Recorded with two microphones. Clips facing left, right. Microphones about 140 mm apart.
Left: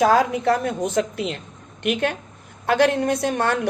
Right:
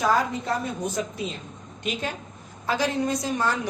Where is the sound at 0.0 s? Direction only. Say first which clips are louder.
Left 6 dB; 75° left (ahead or behind).